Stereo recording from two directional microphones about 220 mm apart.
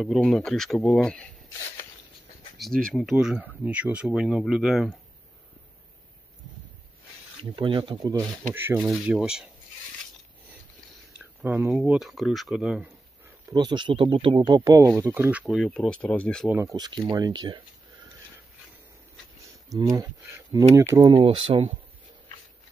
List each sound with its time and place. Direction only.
0.0 s speech: centre (ahead or behind)
2.6 s speech: centre (ahead or behind)
7.5 s speech: 25° right (ahead or behind)
8.6 s speech: 5° right (ahead or behind)
11.4 s speech: 5° right (ahead or behind)
13.5 s speech: 20° right (ahead or behind); by 16.4 s 5° left (ahead or behind)
16.4 s speech: 5° right (ahead or behind)
16.7 s speech: 20° right (ahead or behind)
19.7 s speech: 15° right (ahead or behind)